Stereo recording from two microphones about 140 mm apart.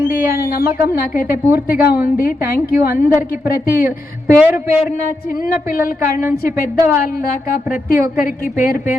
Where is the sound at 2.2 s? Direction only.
80° left.